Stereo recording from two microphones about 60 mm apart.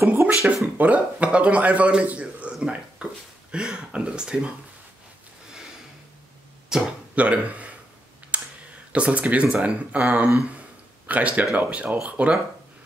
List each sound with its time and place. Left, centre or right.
0.0 s speech: right
0.7 s a man's voice: right
6.7 s speech: centre
8.3 s clicking: right
8.9 s a man's voice: right